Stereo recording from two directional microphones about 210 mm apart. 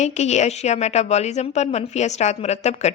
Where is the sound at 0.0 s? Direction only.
35° left (ahead or behind).